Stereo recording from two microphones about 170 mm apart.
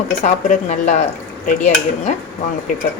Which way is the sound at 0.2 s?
45° left (ahead or behind).